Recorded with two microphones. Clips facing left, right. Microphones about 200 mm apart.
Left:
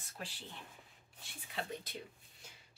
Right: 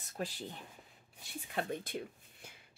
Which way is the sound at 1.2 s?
50° right (ahead or behind).